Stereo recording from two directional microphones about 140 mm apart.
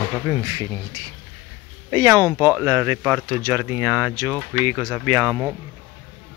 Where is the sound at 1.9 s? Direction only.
25° right (ahead or behind).